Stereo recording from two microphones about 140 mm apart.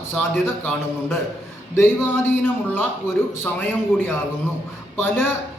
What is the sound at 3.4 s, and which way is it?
A man's voice, 15° left (ahead or behind).